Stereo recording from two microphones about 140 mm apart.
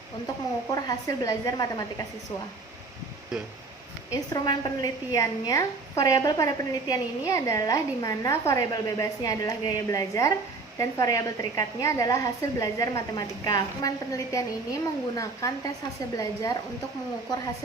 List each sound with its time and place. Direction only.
0.7 s a woman's voice: 25° left (ahead or behind)
4.1 s a woman's voice: 25° left (ahead or behind)